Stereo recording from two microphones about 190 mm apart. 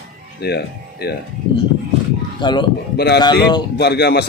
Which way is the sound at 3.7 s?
60° left (ahead or behind).